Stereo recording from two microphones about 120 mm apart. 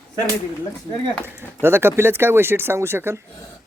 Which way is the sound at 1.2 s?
20° right (ahead or behind).